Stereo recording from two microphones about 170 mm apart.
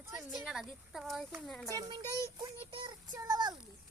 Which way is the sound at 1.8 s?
25° right (ahead or behind).